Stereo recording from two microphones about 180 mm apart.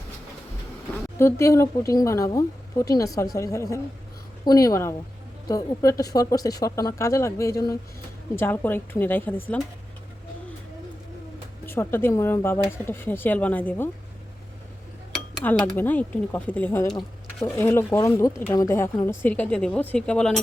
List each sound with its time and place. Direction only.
1.2 s a woman's voice: 15° left (ahead or behind)
11.6 s a woman's voice: 10° left (ahead or behind)
15.4 s a woman's voice: 10° left (ahead or behind)